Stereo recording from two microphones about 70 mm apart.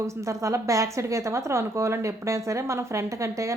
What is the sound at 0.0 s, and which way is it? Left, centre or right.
A woman's voice, right.